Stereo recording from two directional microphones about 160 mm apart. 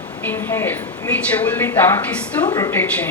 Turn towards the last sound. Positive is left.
turn(degrees=10)  # may be behind; listen again after turning